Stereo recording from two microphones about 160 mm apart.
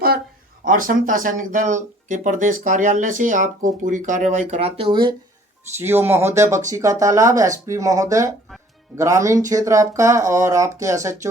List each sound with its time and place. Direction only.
0.6 s speech: 60° right (ahead or behind); by 5.1 s 30° right (ahead or behind)
5.8 s speech: 15° right (ahead or behind)